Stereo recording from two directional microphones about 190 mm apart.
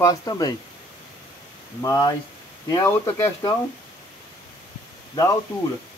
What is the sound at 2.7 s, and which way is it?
Speech, 15° left (ahead or behind).